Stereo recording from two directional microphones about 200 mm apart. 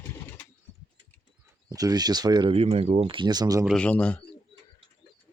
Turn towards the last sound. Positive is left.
turn(degrees=5)  # may be behind; listen again after turning